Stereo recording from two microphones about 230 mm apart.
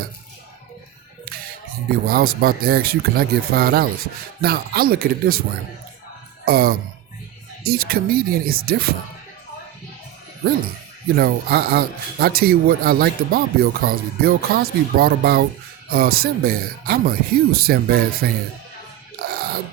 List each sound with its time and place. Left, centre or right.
2.0 s speech: right
6.4 s speech: right
11.1 s speech: right